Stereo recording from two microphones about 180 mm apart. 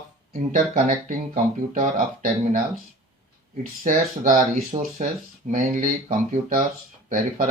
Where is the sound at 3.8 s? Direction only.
45° right (ahead or behind).